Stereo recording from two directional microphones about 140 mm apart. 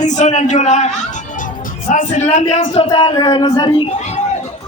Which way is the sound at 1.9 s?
65° left (ahead or behind).